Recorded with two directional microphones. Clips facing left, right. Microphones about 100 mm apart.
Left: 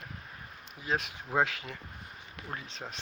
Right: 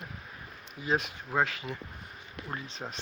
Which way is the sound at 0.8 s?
Centre (ahead or behind).